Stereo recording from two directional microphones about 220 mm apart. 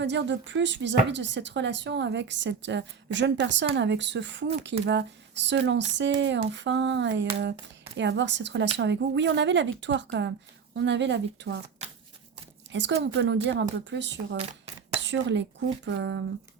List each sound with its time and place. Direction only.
0.0 s a woman's voice: 55° right (ahead or behind)
12.7 s a woman's voice: 55° right (ahead or behind)